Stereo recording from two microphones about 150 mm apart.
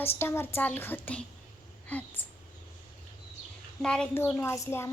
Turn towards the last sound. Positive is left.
turn(degrees=20)  # may be behind; listen again after turning